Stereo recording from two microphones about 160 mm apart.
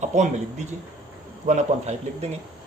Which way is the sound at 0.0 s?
50° right (ahead or behind).